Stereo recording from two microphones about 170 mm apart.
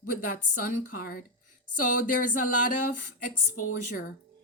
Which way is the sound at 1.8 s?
50° left (ahead or behind).